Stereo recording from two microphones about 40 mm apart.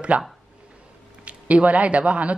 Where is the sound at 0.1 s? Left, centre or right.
Right.